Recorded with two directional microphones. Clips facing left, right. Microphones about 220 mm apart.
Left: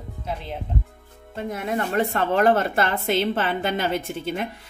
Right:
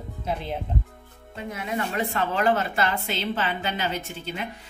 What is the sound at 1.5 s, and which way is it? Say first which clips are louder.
A woman's voice: left 3 dB; 45° left (ahead or behind).